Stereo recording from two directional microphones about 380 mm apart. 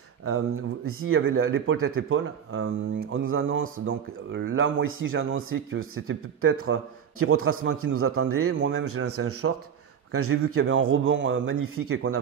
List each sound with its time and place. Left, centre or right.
0.2 s speech: right